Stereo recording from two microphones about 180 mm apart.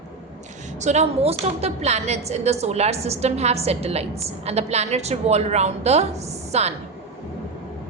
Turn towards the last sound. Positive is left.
turn(degrees=-35)  # may be behind; listen again after turning